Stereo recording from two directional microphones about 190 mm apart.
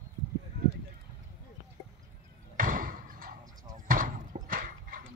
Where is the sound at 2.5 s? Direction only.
45° right (ahead or behind).